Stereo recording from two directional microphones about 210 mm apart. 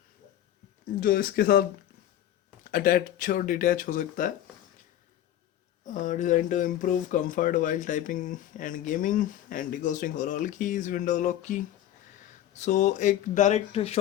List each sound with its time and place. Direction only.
0.9 s speech: 45° left (ahead or behind)
2.6 s speech: 40° left (ahead or behind)
5.8 s speech: 35° left (ahead or behind)